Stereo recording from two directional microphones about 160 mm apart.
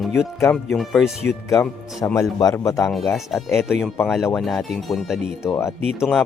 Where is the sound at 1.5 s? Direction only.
20° left (ahead or behind).